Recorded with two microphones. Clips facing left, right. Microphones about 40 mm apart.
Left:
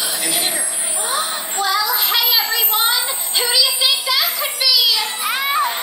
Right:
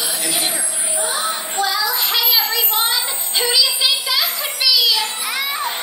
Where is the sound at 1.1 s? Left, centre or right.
Centre.